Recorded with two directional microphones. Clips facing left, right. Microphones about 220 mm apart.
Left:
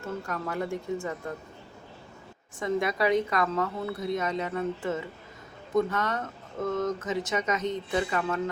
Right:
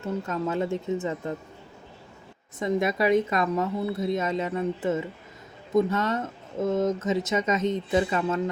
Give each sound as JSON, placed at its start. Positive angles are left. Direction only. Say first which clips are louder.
{"t": 0.0, "sound": "speech", "louder": "right 5 dB", "side_deg": -20}
{"t": 2.6, "sound": "speech", "louder": "right 3 dB", "side_deg": -20}